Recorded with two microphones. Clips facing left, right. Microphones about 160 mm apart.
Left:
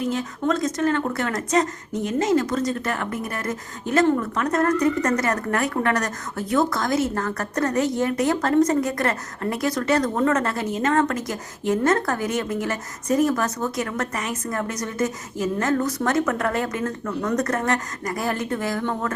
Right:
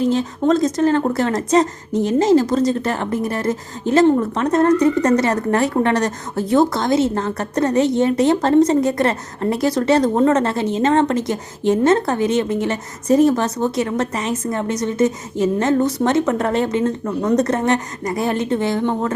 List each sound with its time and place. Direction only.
0.0 s speech: 30° right (ahead or behind)